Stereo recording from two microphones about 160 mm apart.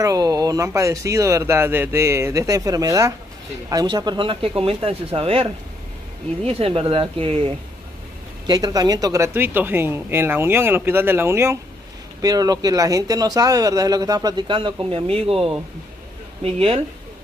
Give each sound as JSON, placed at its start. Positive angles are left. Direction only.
{"t": 0.0, "sound": "speech", "side_deg": -20}
{"t": 8.5, "sound": "speech", "side_deg": -25}